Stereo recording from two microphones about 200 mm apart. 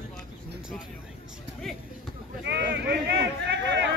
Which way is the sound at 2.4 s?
50° right (ahead or behind).